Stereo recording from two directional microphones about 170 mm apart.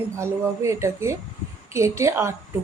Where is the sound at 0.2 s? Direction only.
15° right (ahead or behind).